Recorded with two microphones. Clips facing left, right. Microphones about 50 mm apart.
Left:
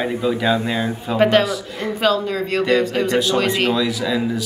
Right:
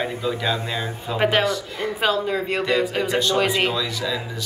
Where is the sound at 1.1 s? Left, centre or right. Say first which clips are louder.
Left 5 dB; centre.